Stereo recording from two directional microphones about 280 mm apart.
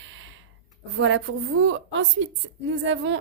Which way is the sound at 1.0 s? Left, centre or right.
Right.